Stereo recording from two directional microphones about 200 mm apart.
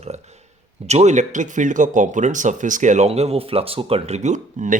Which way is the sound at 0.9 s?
35° right (ahead or behind).